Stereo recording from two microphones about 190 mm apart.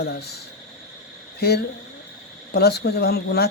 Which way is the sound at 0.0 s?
60° left (ahead or behind).